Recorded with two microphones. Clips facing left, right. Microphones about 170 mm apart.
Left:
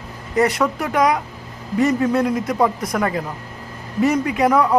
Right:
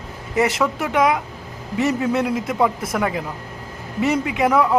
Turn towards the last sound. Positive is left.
turn(degrees=-5)  # may be behind; listen again after turning